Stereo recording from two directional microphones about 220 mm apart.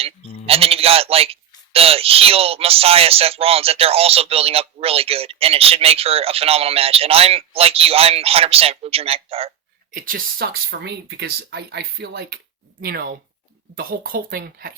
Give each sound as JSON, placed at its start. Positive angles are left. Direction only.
{"t": 0.4, "sound": "speech", "side_deg": -25}
{"t": 9.9, "sound": "speech", "side_deg": -40}